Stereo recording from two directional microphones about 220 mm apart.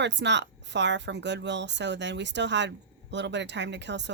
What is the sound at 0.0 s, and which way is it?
Speech, 50° right (ahead or behind).